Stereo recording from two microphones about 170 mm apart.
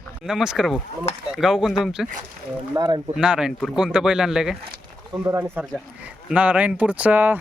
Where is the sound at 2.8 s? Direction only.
25° right (ahead or behind).